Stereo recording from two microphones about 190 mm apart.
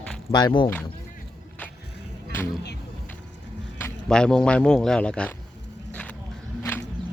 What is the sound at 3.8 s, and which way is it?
Speech, 5° left (ahead or behind).